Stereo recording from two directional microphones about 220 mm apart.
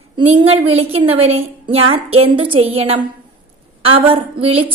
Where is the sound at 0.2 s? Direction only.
25° right (ahead or behind).